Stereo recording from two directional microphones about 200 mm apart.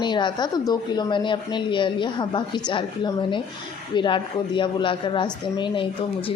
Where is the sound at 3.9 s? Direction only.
25° left (ahead or behind).